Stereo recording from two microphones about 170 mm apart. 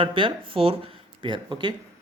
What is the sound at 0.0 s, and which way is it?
Speech, 30° right (ahead or behind).